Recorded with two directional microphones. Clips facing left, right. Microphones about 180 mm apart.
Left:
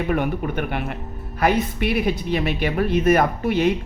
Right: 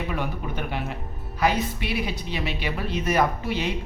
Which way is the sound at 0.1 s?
55° left (ahead or behind).